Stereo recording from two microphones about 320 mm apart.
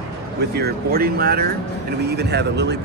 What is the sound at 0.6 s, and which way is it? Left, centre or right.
Speech, right.